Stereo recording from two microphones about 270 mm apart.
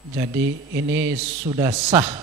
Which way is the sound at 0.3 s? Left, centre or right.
Right.